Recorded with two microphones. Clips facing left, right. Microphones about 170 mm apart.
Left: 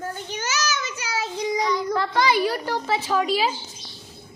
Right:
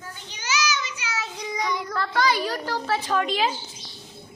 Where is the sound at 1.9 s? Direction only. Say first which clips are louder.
Left 1 dB; 15° left (ahead or behind).